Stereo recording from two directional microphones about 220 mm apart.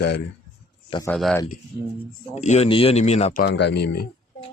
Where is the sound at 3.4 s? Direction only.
50° left (ahead or behind).